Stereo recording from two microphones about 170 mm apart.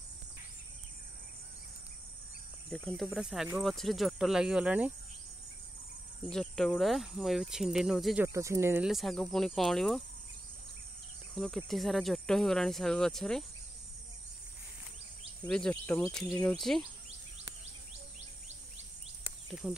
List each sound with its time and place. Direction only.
2.7 s speech: centre (ahead or behind)
6.2 s speech: 5° left (ahead or behind)
8.3 s speech: 15° right (ahead or behind)
8.8 s speech: centre (ahead or behind)
11.3 s speech: centre (ahead or behind)
15.4 s speech: 5° left (ahead or behind)
19.6 s speech: 5° right (ahead or behind)